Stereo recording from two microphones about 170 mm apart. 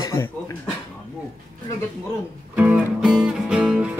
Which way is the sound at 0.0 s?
15° left (ahead or behind).